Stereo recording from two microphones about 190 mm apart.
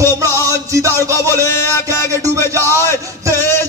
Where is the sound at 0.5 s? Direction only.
15° right (ahead or behind).